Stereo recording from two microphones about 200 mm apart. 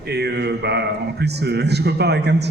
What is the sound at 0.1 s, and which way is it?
A man's voice, 55° right (ahead or behind).